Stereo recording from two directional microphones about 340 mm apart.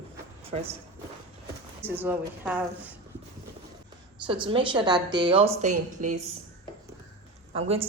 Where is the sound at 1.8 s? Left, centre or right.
Centre.